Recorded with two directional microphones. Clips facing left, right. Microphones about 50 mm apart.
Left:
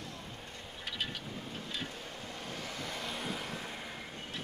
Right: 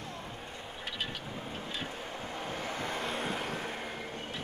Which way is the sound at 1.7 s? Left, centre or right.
Right.